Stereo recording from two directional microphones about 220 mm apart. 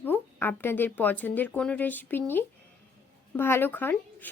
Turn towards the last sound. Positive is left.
turn(degrees=10)  # may be behind; listen again after turning